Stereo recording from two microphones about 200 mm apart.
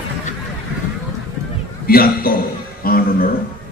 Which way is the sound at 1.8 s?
50° left (ahead or behind).